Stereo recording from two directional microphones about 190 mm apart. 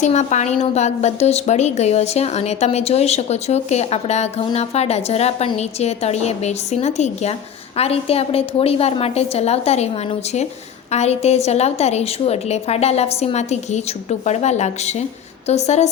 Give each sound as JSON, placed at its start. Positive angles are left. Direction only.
{"t": 0.0, "sound": "a woman's voice", "side_deg": 40}